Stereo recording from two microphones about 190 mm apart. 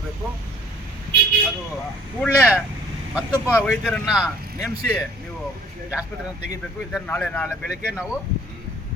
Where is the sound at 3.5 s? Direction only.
5° left (ahead or behind).